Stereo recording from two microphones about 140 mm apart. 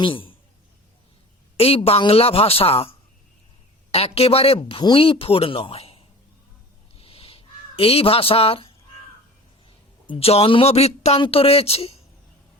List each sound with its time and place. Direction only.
0.0 s a man's voice: 40° left (ahead or behind)
1.5 s a woman's voice: 45° left (ahead or behind)
3.9 s a woman's voice: 45° left (ahead or behind)
6.9 s crow: 40° left (ahead or behind)
9.6 s speech: 40° left (ahead or behind)